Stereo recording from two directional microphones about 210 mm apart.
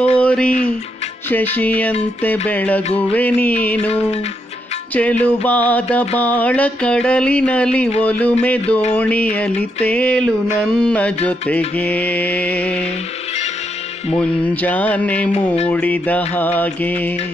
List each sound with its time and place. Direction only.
0.2 s music: 5° left (ahead or behind)
5.2 s music: 5° left (ahead or behind)
14.1 s music: 10° left (ahead or behind)